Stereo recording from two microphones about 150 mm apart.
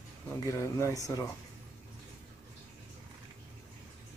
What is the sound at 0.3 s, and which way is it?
Speech, 20° left (ahead or behind).